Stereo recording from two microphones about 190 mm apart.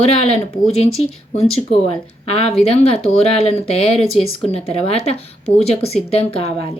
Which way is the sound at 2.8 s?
30° left (ahead or behind).